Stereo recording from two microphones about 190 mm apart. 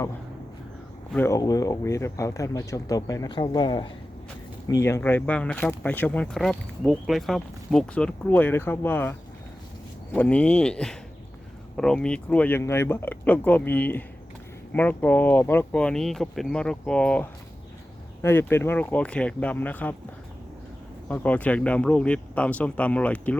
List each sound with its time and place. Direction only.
1.1 s speech: 15° left (ahead or behind)
21.1 s speech: 10° left (ahead or behind)